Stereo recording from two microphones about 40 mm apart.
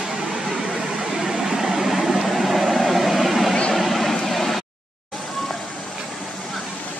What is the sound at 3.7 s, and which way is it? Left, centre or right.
Vehicle, centre.